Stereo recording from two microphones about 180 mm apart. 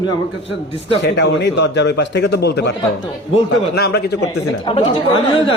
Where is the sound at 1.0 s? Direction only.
70° left (ahead or behind).